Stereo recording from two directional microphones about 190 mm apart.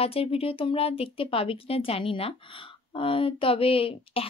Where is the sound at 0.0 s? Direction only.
30° left (ahead or behind).